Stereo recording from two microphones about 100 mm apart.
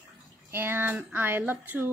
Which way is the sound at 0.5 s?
20° right (ahead or behind).